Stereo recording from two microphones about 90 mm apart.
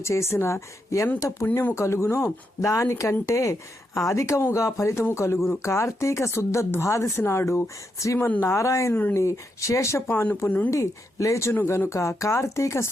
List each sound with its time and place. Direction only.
0.0 s speech: 30° left (ahead or behind)
10.1 s speech: 20° left (ahead or behind)
10.7 s speech: 35° left (ahead or behind)